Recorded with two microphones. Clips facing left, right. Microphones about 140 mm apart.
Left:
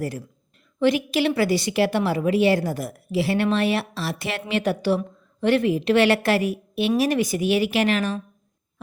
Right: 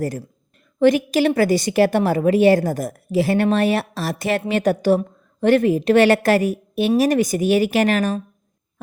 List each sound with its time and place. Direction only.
0.8 s a woman's voice: 45° right (ahead or behind)